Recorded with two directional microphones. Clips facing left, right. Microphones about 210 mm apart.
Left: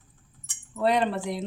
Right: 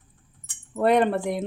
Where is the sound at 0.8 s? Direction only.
55° right (ahead or behind).